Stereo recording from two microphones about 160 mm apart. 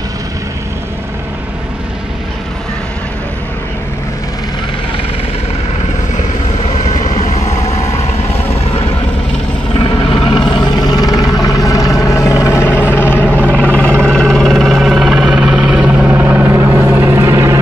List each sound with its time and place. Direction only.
6.9 s vehicle: 20° left (ahead or behind)
10.1 s vehicle: 35° left (ahead or behind); by 17.6 s 15° right (ahead or behind)